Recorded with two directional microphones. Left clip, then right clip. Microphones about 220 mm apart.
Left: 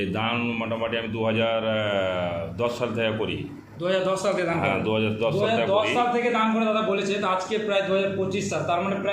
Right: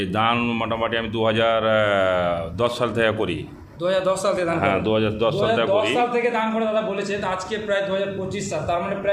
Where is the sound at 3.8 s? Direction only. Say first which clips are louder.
Right 3 dB; 25° right (ahead or behind); by 6.0 s 40° right (ahead or behind).